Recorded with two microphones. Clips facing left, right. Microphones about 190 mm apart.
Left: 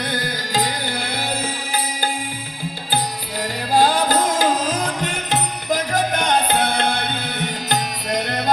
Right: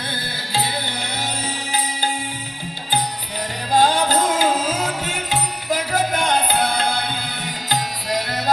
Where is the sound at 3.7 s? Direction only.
10° left (ahead or behind).